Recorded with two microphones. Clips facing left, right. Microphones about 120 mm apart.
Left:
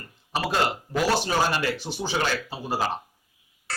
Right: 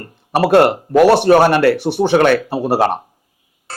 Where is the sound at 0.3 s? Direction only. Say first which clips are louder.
Right 14 dB; 65° right (ahead or behind).